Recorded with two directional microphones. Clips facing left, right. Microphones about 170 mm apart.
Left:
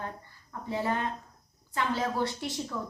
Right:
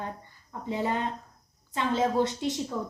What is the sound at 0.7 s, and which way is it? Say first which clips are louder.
A woman's voice: right 1 dB; 20° right (ahead or behind).